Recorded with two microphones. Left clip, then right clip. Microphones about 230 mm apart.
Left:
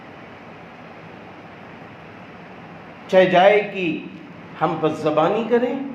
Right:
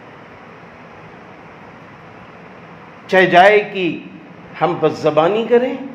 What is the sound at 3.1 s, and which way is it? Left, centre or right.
A man's voice, right.